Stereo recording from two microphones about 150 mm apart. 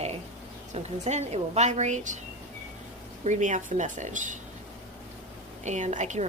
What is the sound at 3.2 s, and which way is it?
A woman's voice, 55° right (ahead or behind).